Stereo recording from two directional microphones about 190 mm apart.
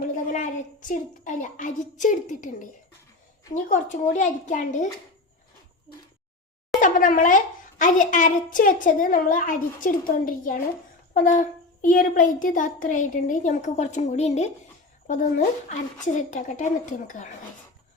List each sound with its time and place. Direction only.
0.3 s child singing: 45° left (ahead or behind)
3.5 s a child's voice: 40° left (ahead or behind)
6.7 s a child's voice: 45° left (ahead or behind)